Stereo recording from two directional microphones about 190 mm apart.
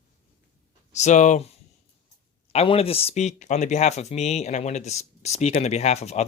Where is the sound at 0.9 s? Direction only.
40° left (ahead or behind).